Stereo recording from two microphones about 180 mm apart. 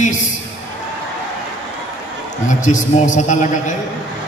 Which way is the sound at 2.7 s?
45° left (ahead or behind).